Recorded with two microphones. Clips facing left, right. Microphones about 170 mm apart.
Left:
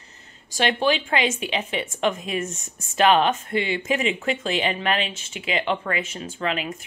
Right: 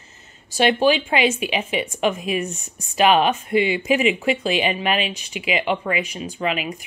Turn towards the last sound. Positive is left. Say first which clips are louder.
# right 2 dB
turn(degrees=-15)  # may be behind; listen again after turning